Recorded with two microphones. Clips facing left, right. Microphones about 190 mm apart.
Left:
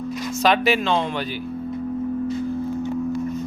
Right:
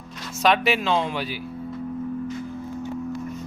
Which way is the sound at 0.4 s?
Centre (ahead or behind).